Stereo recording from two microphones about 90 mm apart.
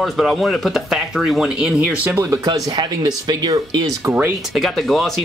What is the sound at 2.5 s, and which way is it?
Speech, 55° right (ahead or behind).